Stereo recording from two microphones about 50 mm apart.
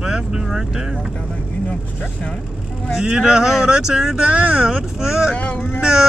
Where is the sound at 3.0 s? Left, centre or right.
Centre.